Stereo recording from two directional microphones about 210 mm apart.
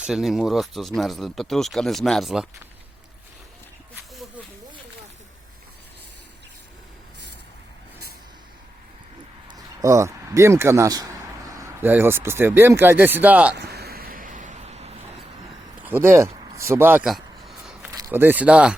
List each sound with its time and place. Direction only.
0.0 s speech: centre (ahead or behind)
9.5 s a man's voice: 15° right (ahead or behind)
13.6 s hiccup: 50° right (ahead or behind); by 14.9 s 30° right (ahead or behind)
15.8 s speech: 10° right (ahead or behind)
16.3 s a sound: 15° right (ahead or behind)
17.9 s speech: 15° right (ahead or behind)